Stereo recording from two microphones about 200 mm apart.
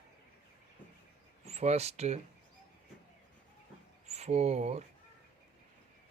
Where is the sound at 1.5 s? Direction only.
30° right (ahead or behind).